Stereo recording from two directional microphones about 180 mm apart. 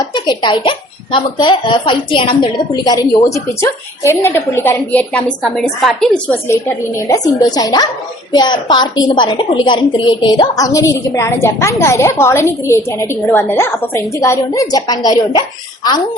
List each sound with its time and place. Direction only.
0.0 s a child's voice: 25° left (ahead or behind); by 6.4 s 5° left (ahead or behind)
6.5 s a child's voice: 15° left (ahead or behind)